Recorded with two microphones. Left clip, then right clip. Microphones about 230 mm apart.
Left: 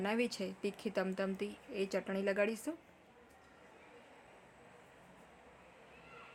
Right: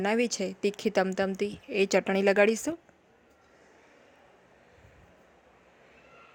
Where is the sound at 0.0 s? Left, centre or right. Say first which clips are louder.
Right 9 dB; right.